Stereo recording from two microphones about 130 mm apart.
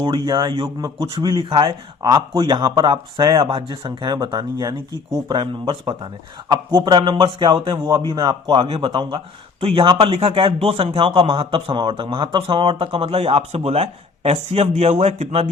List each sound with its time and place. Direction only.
0.0 s a man's voice: 40° right (ahead or behind)
2.3 s a man's voice: 40° right (ahead or behind)